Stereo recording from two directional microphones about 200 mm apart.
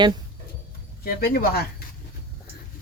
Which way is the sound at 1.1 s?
50° left (ahead or behind).